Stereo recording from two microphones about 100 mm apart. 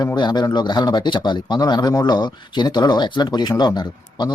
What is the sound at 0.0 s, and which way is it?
A man's voice, 45° left (ahead or behind).